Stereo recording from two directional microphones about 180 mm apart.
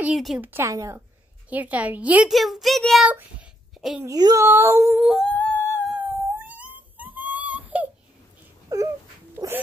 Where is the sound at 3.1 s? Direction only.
5° right (ahead or behind).